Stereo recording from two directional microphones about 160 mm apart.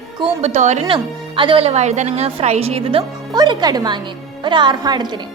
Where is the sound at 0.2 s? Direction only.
45° right (ahead or behind).